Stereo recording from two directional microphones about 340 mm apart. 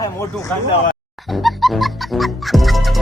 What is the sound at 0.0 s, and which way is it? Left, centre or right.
Speech, centre.